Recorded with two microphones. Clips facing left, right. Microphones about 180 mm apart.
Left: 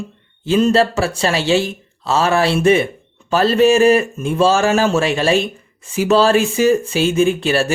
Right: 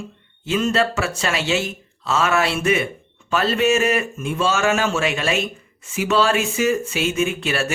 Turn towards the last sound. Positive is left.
turn(degrees=35)  # may be behind; listen again after turning